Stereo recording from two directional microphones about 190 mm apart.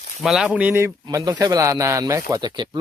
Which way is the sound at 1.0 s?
20° right (ahead or behind).